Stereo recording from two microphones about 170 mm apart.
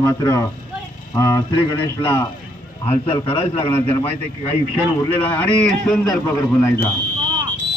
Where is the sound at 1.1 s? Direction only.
20° left (ahead or behind).